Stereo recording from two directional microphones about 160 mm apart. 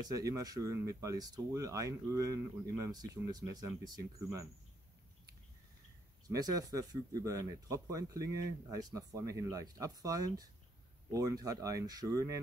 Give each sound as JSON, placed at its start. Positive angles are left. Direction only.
{"t": 0.1, "sound": "speech", "side_deg": -20}
{"t": 6.2, "sound": "speech", "side_deg": -20}